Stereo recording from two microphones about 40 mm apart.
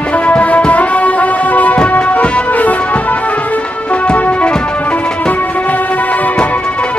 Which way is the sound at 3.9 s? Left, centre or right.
Left.